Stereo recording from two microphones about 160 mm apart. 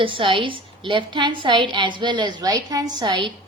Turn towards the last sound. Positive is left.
turn(degrees=-25)  # may be behind; listen again after turning